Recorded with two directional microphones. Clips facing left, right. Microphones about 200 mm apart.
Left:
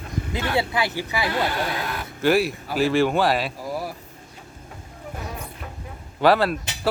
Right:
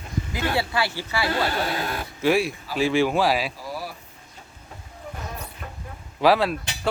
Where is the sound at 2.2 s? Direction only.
Centre (ahead or behind).